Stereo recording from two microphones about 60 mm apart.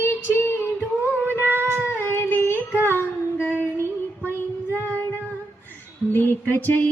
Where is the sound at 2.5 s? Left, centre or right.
Right.